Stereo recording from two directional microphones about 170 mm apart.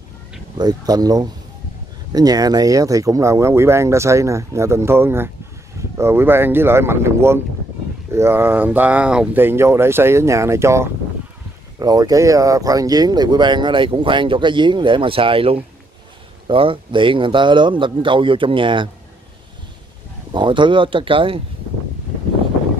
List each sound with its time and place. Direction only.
0.6 s speech: 25° right (ahead or behind)
20.3 s speech: 30° right (ahead or behind)